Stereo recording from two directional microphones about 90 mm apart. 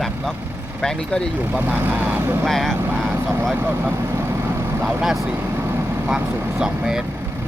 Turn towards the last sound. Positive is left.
turn(degrees=-10)  # may be behind; listen again after turning